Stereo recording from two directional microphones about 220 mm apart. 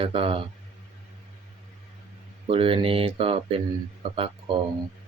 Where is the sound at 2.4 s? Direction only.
25° right (ahead or behind).